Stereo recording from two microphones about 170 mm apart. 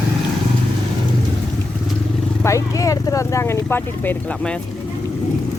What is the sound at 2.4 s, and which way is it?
Speech, 20° left (ahead or behind).